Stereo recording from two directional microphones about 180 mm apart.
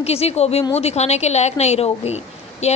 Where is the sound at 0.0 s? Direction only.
35° left (ahead or behind).